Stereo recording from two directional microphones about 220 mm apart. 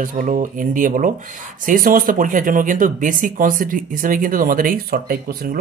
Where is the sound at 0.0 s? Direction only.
35° right (ahead or behind).